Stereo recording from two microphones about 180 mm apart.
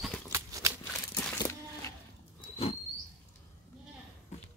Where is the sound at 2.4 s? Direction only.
35° left (ahead or behind).